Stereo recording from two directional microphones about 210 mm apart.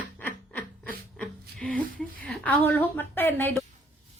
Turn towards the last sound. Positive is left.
turn(degrees=10)  # may be behind; listen again after turning